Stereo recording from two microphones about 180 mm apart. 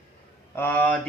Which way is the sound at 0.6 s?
10° left (ahead or behind).